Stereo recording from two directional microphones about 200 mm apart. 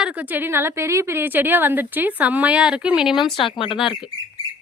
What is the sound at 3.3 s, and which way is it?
Speech, 25° left (ahead or behind).